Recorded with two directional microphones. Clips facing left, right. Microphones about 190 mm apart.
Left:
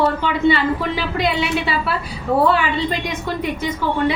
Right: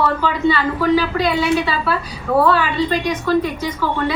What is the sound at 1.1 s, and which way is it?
A woman's voice, 25° left (ahead or behind).